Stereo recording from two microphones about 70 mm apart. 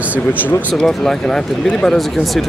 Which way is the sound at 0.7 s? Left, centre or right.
Centre.